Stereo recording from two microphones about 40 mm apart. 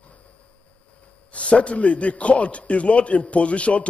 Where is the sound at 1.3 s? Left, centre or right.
Left.